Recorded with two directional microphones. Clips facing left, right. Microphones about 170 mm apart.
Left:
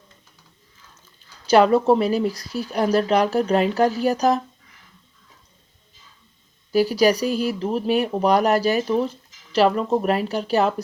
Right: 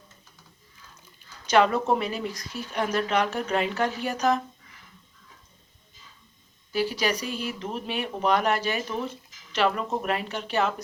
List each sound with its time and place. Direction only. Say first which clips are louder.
1.5 s speech: left 6 dB; 35° left (ahead or behind)
6.7 s speech: left 9 dB; 40° left (ahead or behind)